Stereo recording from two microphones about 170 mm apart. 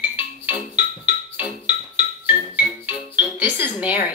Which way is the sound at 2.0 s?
10° right (ahead or behind).